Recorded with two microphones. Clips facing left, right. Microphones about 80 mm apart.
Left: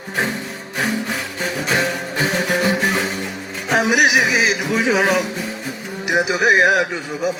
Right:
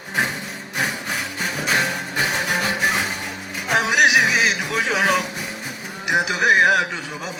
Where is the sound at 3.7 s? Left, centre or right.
Centre.